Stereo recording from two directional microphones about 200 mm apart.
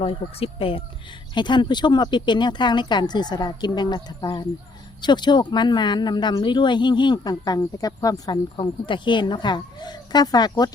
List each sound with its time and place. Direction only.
0.0 s speech: 30° left (ahead or behind)